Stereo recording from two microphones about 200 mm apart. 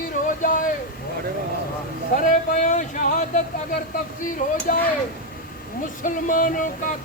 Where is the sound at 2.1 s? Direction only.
40° left (ahead or behind).